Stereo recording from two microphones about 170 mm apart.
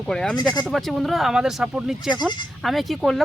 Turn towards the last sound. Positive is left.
turn(degrees=0)  # may be behind; listen again after turning